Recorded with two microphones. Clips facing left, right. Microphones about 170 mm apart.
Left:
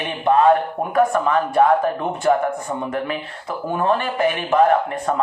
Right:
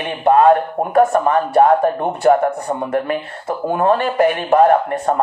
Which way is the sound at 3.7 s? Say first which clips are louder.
Right 5 dB; 45° right (ahead or behind).